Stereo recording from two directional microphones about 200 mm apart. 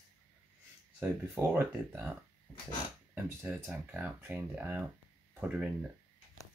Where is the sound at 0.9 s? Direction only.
10° right (ahead or behind).